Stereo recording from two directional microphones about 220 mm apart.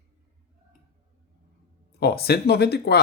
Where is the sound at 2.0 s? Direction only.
45° left (ahead or behind).